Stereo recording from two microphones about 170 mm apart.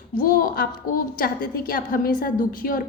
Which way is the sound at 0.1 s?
55° left (ahead or behind).